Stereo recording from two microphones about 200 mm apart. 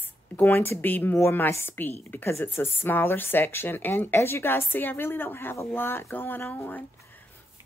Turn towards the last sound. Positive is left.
turn(degrees=10)  # may be behind; listen again after turning